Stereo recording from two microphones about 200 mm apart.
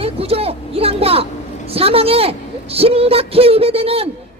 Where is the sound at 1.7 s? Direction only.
30° right (ahead or behind).